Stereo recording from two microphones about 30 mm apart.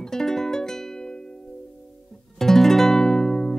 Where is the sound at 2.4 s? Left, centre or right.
Centre.